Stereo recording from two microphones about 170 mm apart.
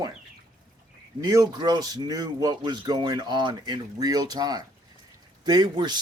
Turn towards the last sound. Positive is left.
turn(degrees=-25)  # may be behind; listen again after turning